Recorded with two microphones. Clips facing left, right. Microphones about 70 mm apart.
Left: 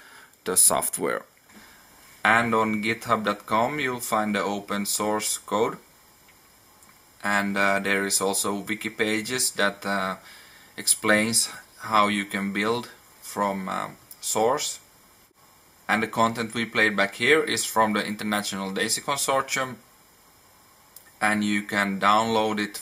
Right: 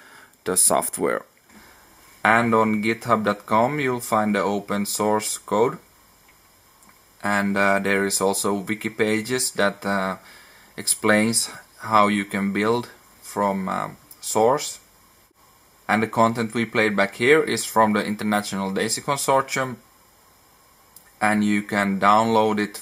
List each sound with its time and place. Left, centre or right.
0.0 s a sound: centre
2.5 s speech: centre
7.2 s speech: centre
15.9 s speech: right
21.2 s speech: right